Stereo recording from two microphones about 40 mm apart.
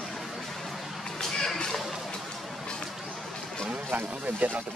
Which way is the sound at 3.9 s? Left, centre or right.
Right.